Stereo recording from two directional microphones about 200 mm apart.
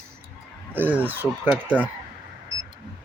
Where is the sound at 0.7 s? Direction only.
10° right (ahead or behind).